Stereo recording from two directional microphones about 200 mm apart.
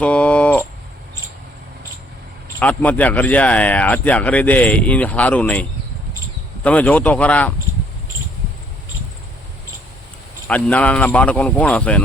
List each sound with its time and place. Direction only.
0.0 s a sound: 5° left (ahead or behind)
2.6 s speech: 5° left (ahead or behind)
10.4 s speech: 5° left (ahead or behind)